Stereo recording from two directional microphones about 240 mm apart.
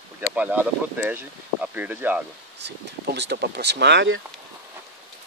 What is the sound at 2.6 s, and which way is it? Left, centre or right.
Speech, right.